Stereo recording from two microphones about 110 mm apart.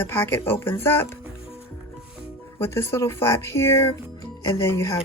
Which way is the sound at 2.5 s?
25° left (ahead or behind).